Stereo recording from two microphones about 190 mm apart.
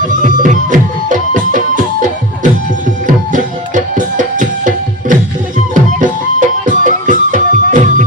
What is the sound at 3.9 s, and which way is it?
Music, 40° right (ahead or behind).